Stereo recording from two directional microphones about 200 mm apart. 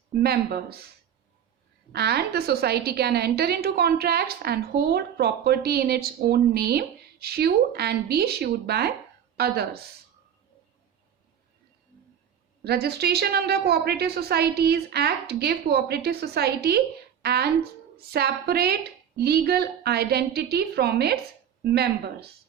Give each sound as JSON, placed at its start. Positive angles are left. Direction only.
{"t": 0.2, "sound": "a woman's voice", "side_deg": -50}
{"t": 1.9, "sound": "a woman's voice", "side_deg": -55}
{"t": 12.6, "sound": "a woman's voice", "side_deg": -55}